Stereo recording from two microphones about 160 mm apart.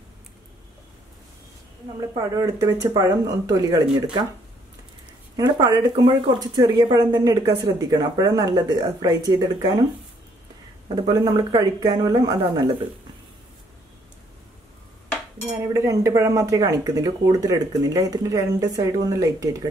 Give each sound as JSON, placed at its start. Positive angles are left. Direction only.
{"t": 2.0, "sound": "speech", "side_deg": -20}
{"t": 5.3, "sound": "speech", "side_deg": -25}
{"t": 11.0, "sound": "speech", "side_deg": -25}
{"t": 15.5, "sound": "speech", "side_deg": -20}